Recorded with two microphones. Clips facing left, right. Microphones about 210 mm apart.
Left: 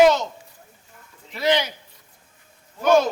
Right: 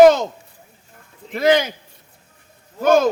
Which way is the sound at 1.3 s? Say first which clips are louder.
Right 5 dB; 50° right (ahead or behind).